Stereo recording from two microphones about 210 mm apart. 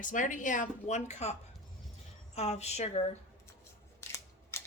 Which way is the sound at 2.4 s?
30° left (ahead or behind).